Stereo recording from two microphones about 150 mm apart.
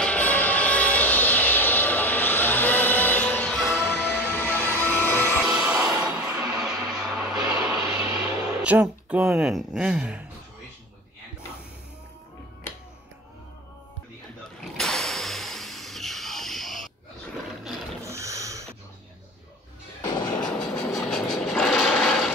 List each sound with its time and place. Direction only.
0.0 s music: 10° left (ahead or behind)
5.5 s music: 10° right (ahead or behind)
5.9 s a sound: 5° right (ahead or behind)
8.6 s speech: 10° right (ahead or behind)
14.8 s a sound: centre (ahead or behind)
18.0 s snort: 20° right (ahead or behind)
20.0 s music: 25° left (ahead or behind)
20.4 s sewing machine: 5° left (ahead or behind)